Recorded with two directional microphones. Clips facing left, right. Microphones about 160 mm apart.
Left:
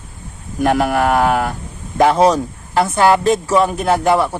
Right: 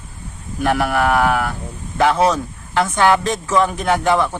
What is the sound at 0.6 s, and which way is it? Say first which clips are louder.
Speech: left 3 dB; 40° left (ahead or behind).